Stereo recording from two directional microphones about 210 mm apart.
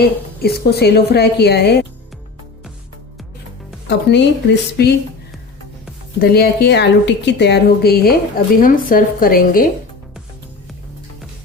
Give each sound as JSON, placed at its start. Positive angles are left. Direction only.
{"t": 0.0, "sound": "a woman's voice", "side_deg": 50}
{"t": 3.8, "sound": "speech", "side_deg": 55}
{"t": 6.1, "sound": "a woman's voice", "side_deg": 45}